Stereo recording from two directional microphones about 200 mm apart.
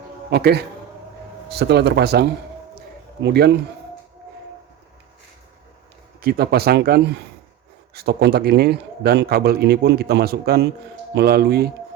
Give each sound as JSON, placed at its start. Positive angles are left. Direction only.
{"t": 0.3, "sound": "a man's voice", "side_deg": -55}
{"t": 6.2, "sound": "a man's voice", "side_deg": -50}